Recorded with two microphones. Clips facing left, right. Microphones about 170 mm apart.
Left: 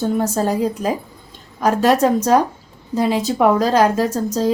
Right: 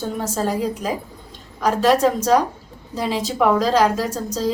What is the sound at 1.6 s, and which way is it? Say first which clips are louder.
Speech: left 2 dB; 45° left (ahead or behind).